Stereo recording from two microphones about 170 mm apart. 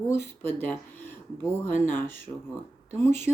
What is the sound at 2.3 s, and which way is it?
Speech, 25° left (ahead or behind).